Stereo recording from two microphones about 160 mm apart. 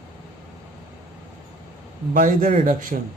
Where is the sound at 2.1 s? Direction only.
55° right (ahead or behind).